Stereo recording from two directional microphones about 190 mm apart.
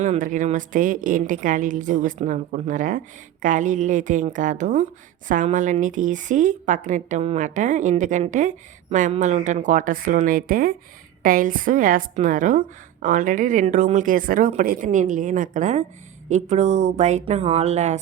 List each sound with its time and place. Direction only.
0.0 s a woman's voice: 40° right (ahead or behind)